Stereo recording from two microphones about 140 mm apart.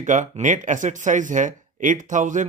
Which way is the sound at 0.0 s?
65° right (ahead or behind).